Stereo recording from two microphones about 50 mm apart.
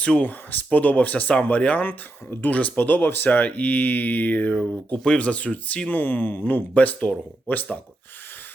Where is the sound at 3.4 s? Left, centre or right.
Left.